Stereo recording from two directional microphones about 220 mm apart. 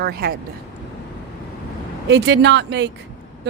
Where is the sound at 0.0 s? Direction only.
45° right (ahead or behind).